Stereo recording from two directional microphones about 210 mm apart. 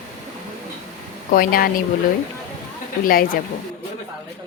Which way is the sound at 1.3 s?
40° left (ahead or behind).